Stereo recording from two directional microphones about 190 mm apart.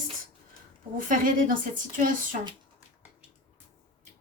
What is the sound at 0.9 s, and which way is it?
Speech, 45° right (ahead or behind).